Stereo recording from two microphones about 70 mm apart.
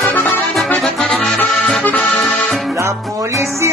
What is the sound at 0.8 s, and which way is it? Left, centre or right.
Accordion, centre.